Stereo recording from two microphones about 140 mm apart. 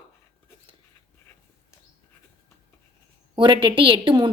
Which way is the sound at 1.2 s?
20° left (ahead or behind).